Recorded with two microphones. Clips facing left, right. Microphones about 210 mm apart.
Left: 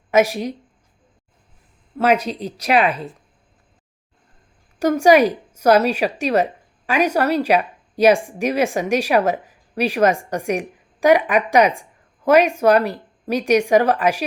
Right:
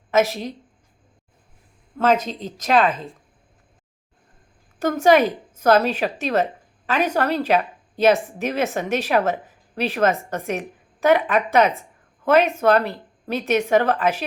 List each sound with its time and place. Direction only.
0.1 s speech: 15° left (ahead or behind)
2.0 s speech: 10° left (ahead or behind)
4.8 s a woman's voice: 10° left (ahead or behind)